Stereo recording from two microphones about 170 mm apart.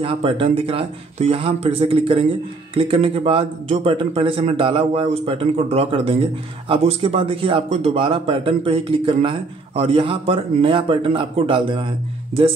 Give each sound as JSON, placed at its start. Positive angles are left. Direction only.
{"t": 0.0, "sound": "speech", "side_deg": -30}